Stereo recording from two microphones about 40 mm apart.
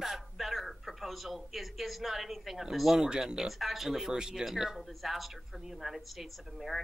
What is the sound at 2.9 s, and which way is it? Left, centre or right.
Speech, centre.